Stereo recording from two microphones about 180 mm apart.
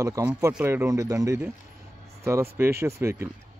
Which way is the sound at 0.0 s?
20° right (ahead or behind).